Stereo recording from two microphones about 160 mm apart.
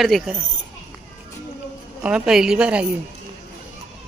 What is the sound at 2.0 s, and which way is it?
Speech, 5° right (ahead or behind).